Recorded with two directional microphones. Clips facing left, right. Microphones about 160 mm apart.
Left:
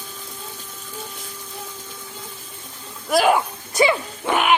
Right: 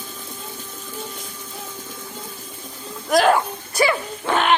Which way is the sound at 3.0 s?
10° left (ahead or behind).